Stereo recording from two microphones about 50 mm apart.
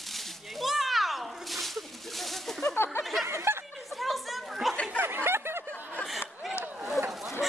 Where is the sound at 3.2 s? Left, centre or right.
Right.